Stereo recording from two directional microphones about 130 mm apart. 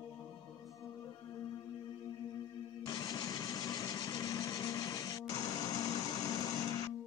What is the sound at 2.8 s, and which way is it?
Vehicle, 30° left (ahead or behind).